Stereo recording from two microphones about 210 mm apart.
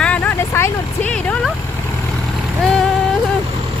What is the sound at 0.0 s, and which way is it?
Vehicle, 10° left (ahead or behind).